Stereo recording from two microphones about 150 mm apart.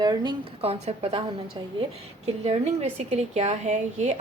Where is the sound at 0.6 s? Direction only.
45° right (ahead or behind).